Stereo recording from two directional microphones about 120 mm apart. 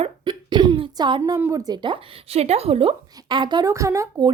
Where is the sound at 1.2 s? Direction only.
20° right (ahead or behind); by 3.0 s 55° right (ahead or behind).